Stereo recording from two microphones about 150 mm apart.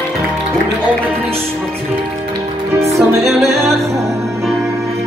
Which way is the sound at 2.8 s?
20° right (ahead or behind).